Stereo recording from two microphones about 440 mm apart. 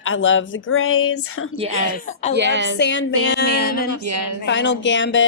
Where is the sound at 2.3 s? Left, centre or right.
Right.